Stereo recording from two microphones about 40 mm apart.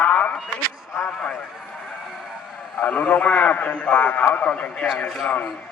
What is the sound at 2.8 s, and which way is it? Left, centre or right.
A man's voice, left.